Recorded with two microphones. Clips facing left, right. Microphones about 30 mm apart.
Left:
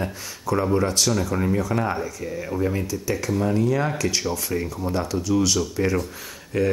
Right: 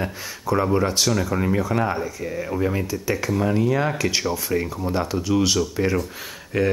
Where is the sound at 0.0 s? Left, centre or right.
Centre.